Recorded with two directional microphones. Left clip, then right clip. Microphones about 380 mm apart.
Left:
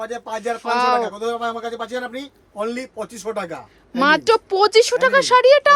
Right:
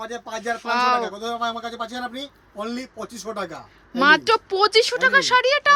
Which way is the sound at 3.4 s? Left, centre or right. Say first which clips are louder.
Left 4 dB; centre.